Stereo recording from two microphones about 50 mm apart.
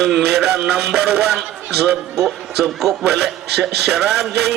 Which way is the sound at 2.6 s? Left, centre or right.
Centre.